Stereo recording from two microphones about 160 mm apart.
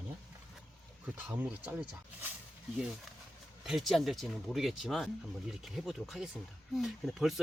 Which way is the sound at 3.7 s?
Centre (ahead or behind).